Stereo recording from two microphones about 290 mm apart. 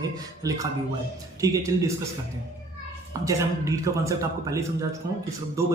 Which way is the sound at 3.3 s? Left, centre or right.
Centre.